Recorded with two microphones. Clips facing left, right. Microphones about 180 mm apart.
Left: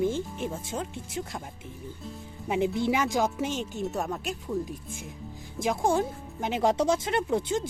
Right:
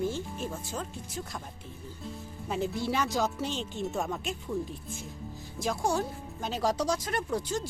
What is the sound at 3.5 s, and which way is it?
Speech, 45° left (ahead or behind).